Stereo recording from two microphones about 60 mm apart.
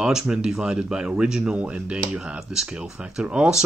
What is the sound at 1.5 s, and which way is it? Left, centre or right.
Speech, centre.